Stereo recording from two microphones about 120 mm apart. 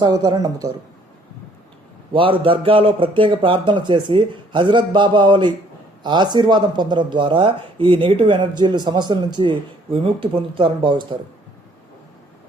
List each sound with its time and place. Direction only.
0.0 s speech: 35° right (ahead or behind)
2.1 s speech: 50° right (ahead or behind)